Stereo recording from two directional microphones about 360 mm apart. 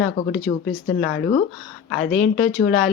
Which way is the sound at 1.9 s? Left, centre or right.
Centre.